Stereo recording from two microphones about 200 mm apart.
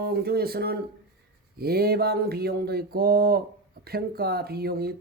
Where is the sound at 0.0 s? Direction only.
50° right (ahead or behind).